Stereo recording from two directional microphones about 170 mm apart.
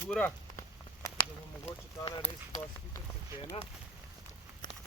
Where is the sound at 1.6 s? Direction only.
30° left (ahead or behind).